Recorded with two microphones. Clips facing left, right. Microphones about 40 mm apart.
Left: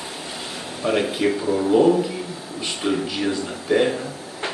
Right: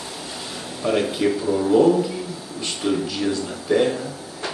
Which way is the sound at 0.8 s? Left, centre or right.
Centre.